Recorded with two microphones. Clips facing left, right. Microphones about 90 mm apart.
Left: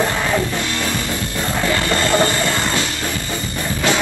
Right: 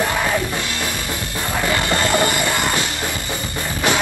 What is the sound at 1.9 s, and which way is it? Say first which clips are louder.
Music: left 2 dB; 15° right (ahead or behind).